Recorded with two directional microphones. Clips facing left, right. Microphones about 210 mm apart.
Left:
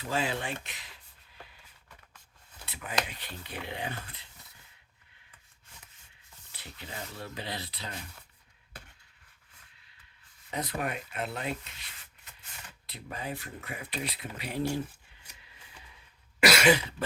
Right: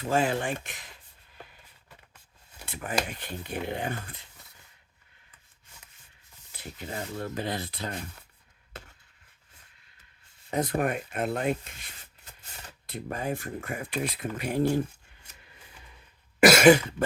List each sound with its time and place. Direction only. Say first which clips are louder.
0.0 s speech: right 6 dB; 50° right (ahead or behind)
2.6 s speech: right 4 dB; 50° right (ahead or behind)
6.5 s speech: right 7 dB; 45° right (ahead or behind)
10.5 s speech: right 7 dB; 50° right (ahead or behind)
16.4 s cough: right 7 dB; 50° right (ahead or behind)